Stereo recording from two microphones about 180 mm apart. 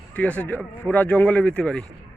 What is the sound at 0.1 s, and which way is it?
Speech, 10° left (ahead or behind).